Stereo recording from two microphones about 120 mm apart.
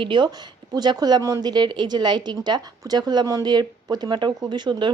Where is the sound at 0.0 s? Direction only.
40° right (ahead or behind).